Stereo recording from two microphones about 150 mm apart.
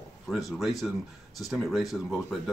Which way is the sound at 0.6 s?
Centre (ahead or behind).